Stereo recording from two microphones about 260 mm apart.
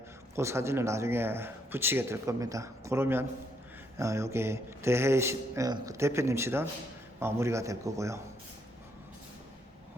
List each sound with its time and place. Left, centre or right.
0.3 s speech: centre